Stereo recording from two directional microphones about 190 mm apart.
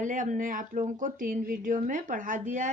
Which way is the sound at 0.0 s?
40° right (ahead or behind).